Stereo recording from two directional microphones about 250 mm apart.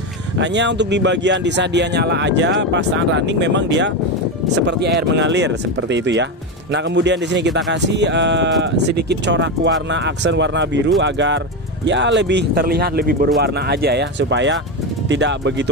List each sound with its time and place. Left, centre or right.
0.4 s speech: right